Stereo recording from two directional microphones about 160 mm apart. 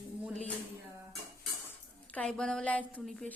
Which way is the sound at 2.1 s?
5° left (ahead or behind).